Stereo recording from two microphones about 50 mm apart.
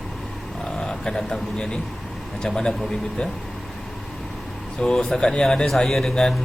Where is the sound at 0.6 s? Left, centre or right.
Centre.